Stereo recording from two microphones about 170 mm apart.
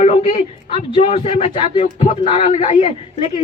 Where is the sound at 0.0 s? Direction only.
35° left (ahead or behind).